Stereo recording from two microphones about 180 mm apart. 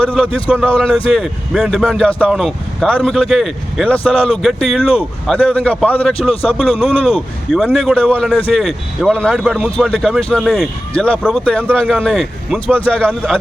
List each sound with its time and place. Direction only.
0.3 s a man's voice: 5° left (ahead or behind)